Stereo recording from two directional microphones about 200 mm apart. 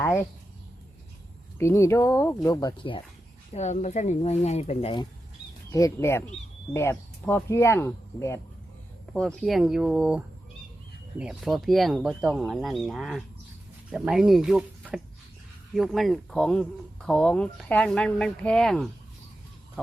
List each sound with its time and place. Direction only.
0.0 s speech: 10° left (ahead or behind)
1.5 s speech: 15° left (ahead or behind); by 5.0 s 30° left (ahead or behind)
5.7 s speech: 15° left (ahead or behind)
9.1 s speech: centre (ahead or behind)